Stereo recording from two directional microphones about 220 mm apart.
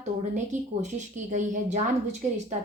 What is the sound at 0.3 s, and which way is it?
A woman's voice, 30° right (ahead or behind).